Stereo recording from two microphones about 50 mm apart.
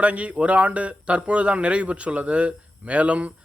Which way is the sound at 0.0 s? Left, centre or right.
Right.